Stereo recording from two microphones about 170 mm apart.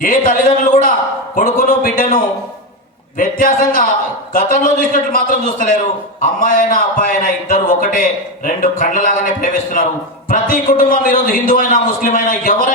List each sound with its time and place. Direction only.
0.0 s a man's voice: 55° left (ahead or behind)
3.2 s a man's voice: 55° left (ahead or behind)